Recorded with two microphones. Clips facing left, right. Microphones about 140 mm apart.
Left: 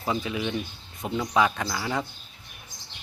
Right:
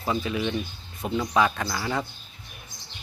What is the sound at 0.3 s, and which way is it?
Speech, 10° left (ahead or behind).